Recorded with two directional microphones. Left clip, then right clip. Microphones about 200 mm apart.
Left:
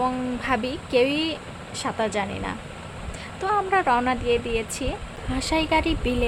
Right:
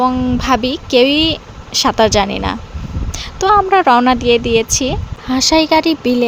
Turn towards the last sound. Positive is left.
turn(degrees=-35)  # may be behind; listen again after turning